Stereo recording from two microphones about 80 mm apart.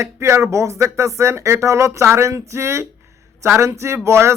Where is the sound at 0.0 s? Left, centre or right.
Right.